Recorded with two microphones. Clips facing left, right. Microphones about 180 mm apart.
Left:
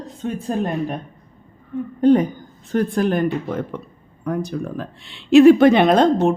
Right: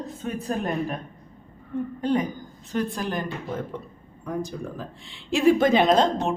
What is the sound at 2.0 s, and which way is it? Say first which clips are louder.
A woman's voice: left 11 dB; 55° left (ahead or behind).